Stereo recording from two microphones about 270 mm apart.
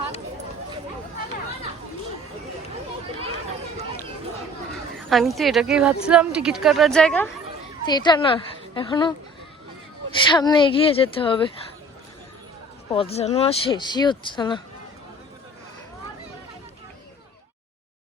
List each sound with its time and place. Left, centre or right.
5.0 s a woman's voice: centre
7.9 s a woman's voice: centre
10.2 s speech: centre
12.9 s speech: left